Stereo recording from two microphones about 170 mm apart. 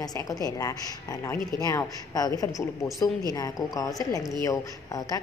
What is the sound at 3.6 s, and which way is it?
A woman's voice, 20° left (ahead or behind).